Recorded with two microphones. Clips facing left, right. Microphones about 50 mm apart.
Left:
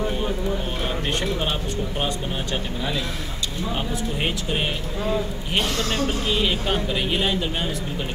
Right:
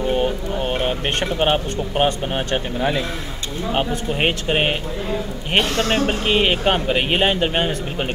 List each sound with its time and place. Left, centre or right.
0.1 s a man's voice: right